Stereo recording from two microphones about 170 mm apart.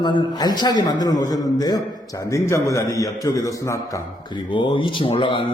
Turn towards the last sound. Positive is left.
turn(degrees=30)  # may be behind; listen again after turning